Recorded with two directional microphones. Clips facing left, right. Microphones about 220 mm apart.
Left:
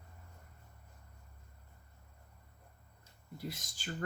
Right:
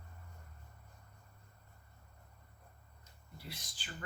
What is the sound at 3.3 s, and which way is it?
Speech, 45° left (ahead or behind).